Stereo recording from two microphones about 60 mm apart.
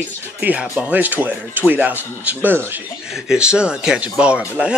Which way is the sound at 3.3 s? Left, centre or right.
Centre.